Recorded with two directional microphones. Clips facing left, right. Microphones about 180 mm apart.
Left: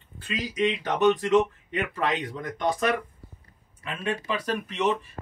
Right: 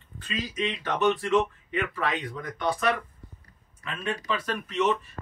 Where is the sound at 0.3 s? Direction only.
15° left (ahead or behind).